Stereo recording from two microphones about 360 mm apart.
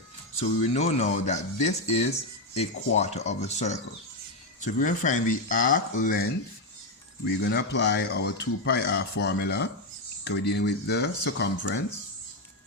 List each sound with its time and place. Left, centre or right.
0.3 s speech: centre